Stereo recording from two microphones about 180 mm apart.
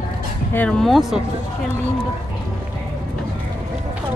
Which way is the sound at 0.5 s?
5° left (ahead or behind).